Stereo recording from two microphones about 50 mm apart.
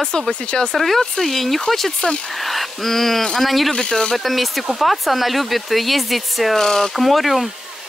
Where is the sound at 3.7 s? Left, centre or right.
Centre.